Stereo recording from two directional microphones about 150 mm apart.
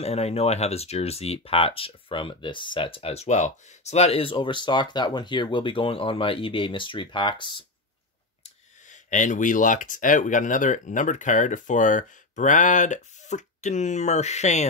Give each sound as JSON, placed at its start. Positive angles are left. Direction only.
{"t": 0.0, "sound": "speech", "side_deg": 45}
{"t": 8.8, "sound": "speech", "side_deg": 55}